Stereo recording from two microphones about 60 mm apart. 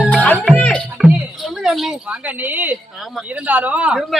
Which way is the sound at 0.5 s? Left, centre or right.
Centre.